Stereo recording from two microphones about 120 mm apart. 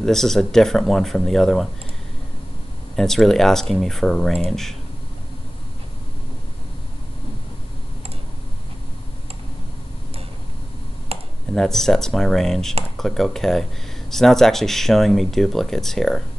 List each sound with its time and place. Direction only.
0.0 s speech: 5° left (ahead or behind)
3.0 s speech: 5° left (ahead or behind)
11.1 s computer keyboard: 55° right (ahead or behind)
11.5 s speech: 5° left (ahead or behind)